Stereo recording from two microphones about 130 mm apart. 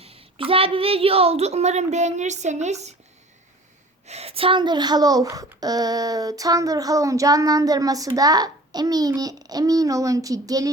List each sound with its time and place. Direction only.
0.0 s a woman's voice: 45° right (ahead or behind)
4.0 s a child's voice: 55° right (ahead or behind); by 10.7 s 25° right (ahead or behind)